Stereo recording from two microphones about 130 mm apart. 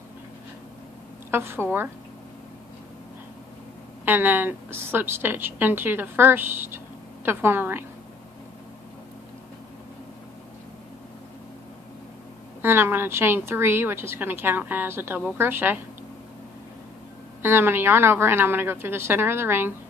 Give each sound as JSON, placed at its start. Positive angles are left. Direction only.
{"t": 1.3, "sound": "a woman's voice", "side_deg": -20}
{"t": 4.0, "sound": "a woman's voice", "side_deg": -15}
{"t": 12.6, "sound": "a woman's voice", "side_deg": -15}
{"t": 17.4, "sound": "a woman's voice", "side_deg": -20}